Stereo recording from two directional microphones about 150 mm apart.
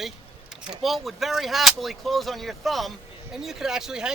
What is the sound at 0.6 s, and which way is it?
Speech, centre (ahead or behind).